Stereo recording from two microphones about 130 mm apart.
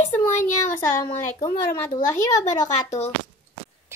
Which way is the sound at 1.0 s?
35° left (ahead or behind).